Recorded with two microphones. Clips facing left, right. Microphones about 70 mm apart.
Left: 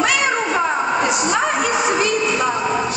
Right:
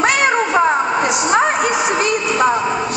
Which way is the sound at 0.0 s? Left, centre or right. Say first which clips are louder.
Right 3 dB; right.